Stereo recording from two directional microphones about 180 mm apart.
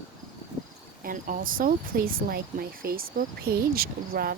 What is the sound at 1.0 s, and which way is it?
Speech, 50° right (ahead or behind).